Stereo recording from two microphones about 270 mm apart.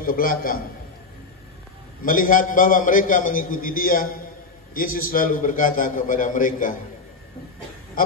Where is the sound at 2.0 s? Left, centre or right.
Left.